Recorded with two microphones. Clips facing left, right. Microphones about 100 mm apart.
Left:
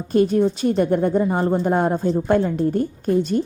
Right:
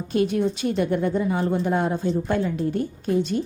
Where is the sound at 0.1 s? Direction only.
40° left (ahead or behind).